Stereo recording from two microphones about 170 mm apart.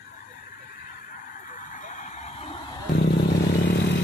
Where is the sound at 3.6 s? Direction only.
90° left.